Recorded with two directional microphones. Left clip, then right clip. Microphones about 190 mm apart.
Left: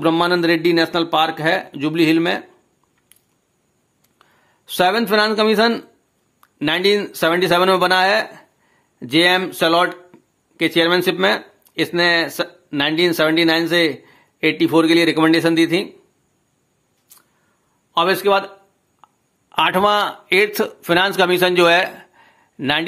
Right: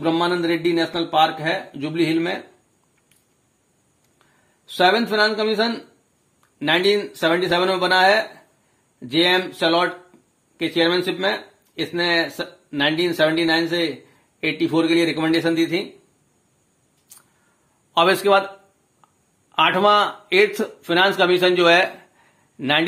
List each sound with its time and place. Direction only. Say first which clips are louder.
0.0 s speech: left 4 dB; 25° left (ahead or behind)
4.2 s a man's voice: left 5 dB; 30° left (ahead or behind)
17.1 s a sound: right 1 dB; centre (ahead or behind)
17.9 s a man's voice: even; 10° left (ahead or behind)
19.5 s speech: even; 30° left (ahead or behind)